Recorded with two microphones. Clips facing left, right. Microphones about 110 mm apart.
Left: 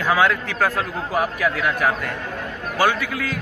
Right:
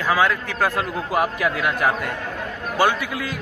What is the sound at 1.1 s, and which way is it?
Speech, 20° right (ahead or behind).